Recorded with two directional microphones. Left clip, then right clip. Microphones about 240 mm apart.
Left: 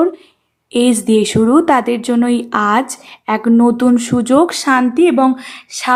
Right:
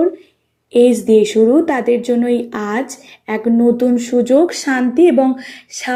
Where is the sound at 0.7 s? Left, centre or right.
Centre.